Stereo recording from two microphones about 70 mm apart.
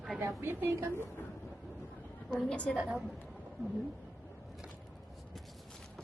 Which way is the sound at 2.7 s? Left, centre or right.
Centre.